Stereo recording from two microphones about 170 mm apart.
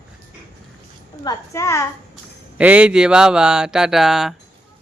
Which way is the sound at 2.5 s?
5° right (ahead or behind).